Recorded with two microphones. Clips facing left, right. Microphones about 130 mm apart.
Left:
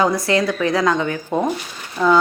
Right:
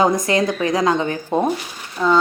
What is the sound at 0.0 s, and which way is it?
A woman's voice, 20° right (ahead or behind).